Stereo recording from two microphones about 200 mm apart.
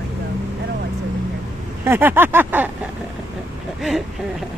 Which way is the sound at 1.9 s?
10° right (ahead or behind).